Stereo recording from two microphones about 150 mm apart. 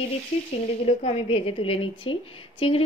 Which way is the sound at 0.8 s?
45° left (ahead or behind).